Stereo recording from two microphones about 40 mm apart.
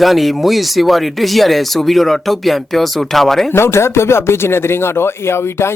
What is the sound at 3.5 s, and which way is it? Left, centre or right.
Speech, left.